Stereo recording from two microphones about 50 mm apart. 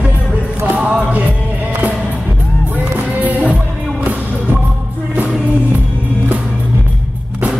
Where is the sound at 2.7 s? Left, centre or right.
Right.